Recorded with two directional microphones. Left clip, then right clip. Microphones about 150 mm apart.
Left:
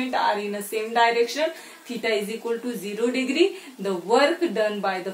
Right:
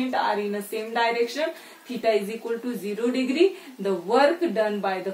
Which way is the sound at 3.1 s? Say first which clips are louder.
Right 1 dB; 15° left (ahead or behind).